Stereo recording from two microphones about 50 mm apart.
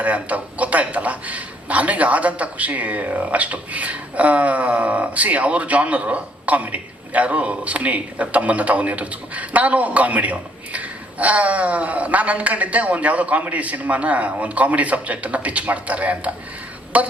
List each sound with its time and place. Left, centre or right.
0.0 s a man's voice: right